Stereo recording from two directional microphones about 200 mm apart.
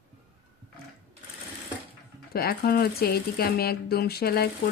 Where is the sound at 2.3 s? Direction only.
50° left (ahead or behind).